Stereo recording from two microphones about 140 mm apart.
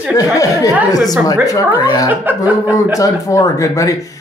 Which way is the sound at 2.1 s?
15° right (ahead or behind).